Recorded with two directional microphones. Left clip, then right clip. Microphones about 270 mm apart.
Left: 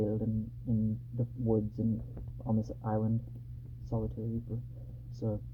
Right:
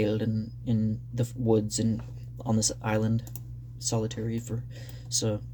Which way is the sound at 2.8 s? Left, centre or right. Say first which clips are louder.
Right 6 dB; right.